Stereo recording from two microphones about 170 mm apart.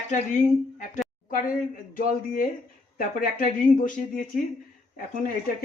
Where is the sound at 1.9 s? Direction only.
55° left (ahead or behind).